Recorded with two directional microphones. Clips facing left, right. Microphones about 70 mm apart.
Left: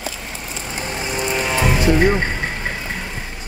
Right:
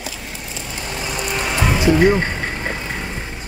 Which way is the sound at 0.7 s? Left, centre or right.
Left.